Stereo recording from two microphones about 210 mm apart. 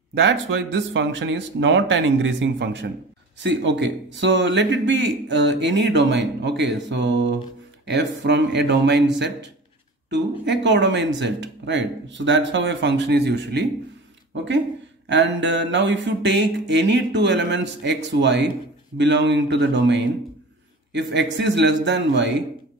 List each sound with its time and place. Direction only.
0.1 s a man's voice: 55° right (ahead or behind)